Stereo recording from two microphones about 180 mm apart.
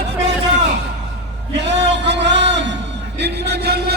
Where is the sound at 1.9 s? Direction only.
75° right (ahead or behind).